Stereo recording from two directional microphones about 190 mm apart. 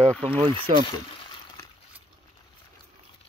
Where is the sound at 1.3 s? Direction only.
25° left (ahead or behind).